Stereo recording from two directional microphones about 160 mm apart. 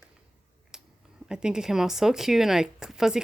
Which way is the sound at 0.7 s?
5° right (ahead or behind).